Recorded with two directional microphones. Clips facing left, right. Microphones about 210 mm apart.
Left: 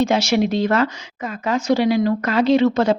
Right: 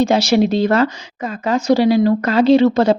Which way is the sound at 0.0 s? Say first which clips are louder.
Right 4 dB; 35° right (ahead or behind).